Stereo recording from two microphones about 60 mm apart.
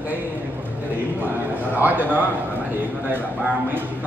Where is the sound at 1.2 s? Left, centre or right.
Right.